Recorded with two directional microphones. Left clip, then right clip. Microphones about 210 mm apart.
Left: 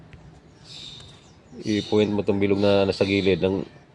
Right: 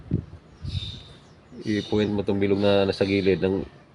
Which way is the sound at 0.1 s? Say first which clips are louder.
Right 17 dB; 10° left (ahead or behind).